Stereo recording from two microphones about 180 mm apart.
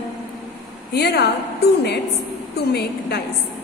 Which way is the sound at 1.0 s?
65° left (ahead or behind).